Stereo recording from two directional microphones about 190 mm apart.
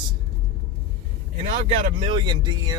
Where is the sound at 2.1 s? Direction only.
25° right (ahead or behind).